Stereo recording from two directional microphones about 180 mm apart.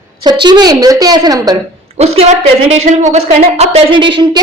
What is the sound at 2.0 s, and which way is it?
A woman's voice, 35° right (ahead or behind).